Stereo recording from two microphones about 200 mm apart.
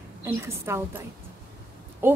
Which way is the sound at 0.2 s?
15° right (ahead or behind).